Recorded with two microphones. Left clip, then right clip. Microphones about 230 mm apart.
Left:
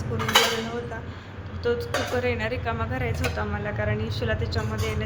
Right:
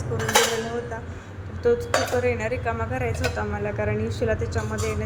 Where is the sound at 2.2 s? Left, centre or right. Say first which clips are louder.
Right 2 dB; centre.